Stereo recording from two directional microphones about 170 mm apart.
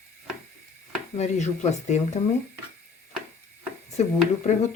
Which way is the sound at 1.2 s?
40° left (ahead or behind).